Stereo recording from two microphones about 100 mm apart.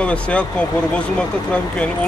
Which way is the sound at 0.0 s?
10° left (ahead or behind).